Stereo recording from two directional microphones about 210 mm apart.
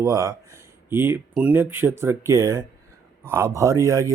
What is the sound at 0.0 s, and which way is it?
Speech, 15° right (ahead or behind).